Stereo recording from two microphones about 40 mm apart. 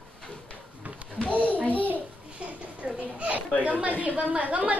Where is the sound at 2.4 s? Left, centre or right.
Right.